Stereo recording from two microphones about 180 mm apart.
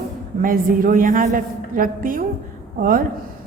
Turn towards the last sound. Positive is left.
turn(degrees=-50)  # may be behind; listen again after turning